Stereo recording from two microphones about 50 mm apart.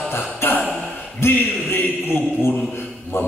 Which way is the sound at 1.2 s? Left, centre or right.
Left.